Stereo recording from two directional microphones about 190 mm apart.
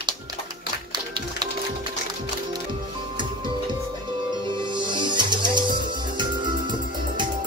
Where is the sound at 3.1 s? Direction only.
25° right (ahead or behind).